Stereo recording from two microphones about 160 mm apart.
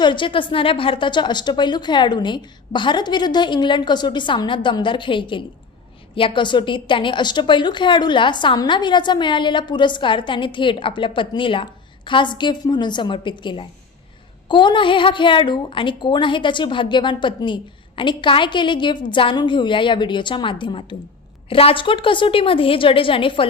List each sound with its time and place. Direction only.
0.0 s a woman's voice: 30° left (ahead or behind)